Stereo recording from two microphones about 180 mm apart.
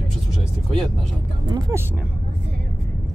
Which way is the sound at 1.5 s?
20° right (ahead or behind).